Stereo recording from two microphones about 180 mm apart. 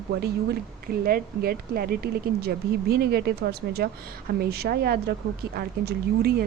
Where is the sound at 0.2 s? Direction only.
60° right (ahead or behind).